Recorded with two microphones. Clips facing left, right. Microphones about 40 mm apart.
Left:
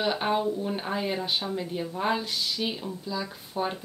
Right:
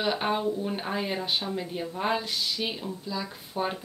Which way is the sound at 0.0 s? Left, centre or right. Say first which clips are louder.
Left 1 dB; centre.